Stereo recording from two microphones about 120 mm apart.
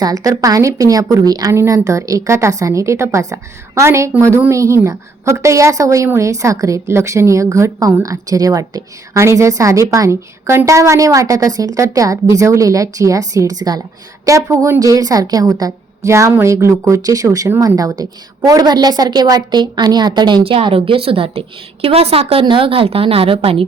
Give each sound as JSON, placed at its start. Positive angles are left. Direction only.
{"t": 0.0, "sound": "a woman's voice", "side_deg": -30}